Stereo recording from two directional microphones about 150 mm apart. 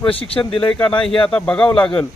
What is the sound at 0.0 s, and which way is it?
Speech, 35° left (ahead or behind).